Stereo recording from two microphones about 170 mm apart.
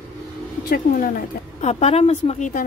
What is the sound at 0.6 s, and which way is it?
Speech, 60° left (ahead or behind).